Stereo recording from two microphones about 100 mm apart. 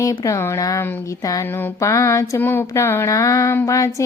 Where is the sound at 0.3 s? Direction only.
30° left (ahead or behind).